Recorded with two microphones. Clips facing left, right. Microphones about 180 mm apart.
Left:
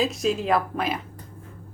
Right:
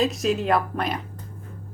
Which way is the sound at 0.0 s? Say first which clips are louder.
Right 1 dB; centre (ahead or behind).